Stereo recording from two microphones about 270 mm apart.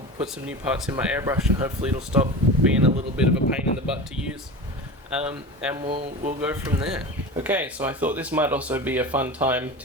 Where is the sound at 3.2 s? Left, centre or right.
Centre.